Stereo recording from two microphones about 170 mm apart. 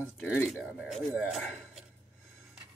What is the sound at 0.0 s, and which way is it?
Speech, 5° right (ahead or behind).